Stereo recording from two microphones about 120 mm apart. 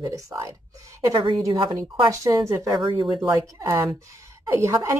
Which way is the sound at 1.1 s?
45° right (ahead or behind).